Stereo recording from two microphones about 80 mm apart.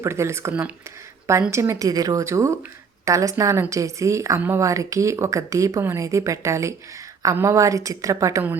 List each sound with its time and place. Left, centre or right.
0.0 s a woman's voice: right